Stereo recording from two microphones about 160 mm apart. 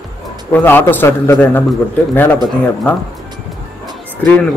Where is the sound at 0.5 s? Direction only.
10° left (ahead or behind).